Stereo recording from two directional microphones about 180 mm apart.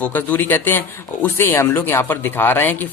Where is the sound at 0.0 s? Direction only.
10° left (ahead or behind).